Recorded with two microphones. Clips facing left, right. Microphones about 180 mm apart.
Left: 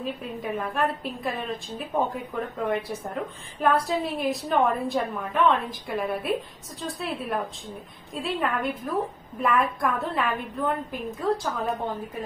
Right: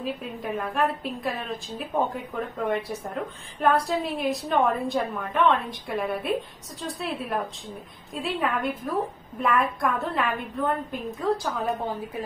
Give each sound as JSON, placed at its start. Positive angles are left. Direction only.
{"t": 0.0, "sound": "a woman's voice", "side_deg": 0}